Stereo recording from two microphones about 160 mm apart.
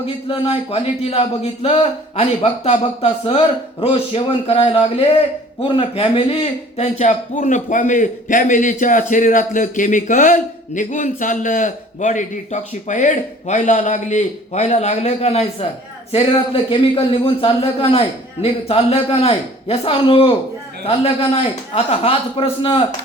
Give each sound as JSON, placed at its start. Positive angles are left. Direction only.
{"t": 0.0, "sound": "a man's voice", "side_deg": 35}